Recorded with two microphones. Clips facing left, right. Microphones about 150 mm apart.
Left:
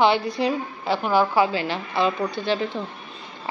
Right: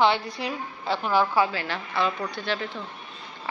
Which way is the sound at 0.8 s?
5° left (ahead or behind).